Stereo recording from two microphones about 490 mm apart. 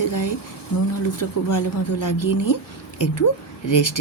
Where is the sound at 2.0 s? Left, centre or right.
Left.